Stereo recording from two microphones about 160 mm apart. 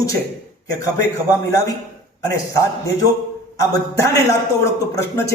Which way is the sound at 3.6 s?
20° left (ahead or behind).